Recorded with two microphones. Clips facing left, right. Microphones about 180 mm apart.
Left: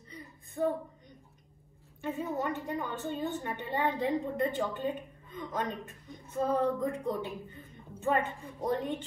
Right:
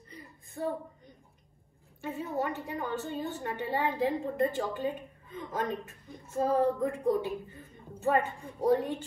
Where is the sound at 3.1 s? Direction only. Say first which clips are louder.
Even; 5° right (ahead or behind).